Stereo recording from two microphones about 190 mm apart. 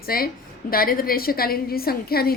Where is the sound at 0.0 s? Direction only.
50° left (ahead or behind).